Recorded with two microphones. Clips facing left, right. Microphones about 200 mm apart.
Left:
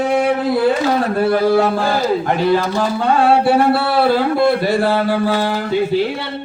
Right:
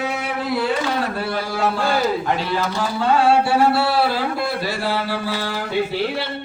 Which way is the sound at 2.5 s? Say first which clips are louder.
Left 7 dB; 50° left (ahead or behind).